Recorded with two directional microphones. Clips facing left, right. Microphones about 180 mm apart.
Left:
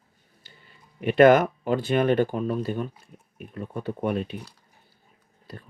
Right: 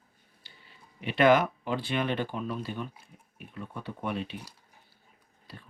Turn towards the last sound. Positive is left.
turn(degrees=45)  # may be behind; listen again after turning